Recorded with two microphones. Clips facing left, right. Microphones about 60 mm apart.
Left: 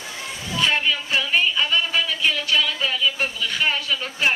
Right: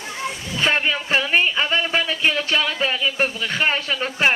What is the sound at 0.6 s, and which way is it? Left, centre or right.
Speech, right.